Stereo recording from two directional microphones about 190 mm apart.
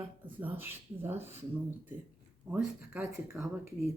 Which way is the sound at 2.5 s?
5° right (ahead or behind).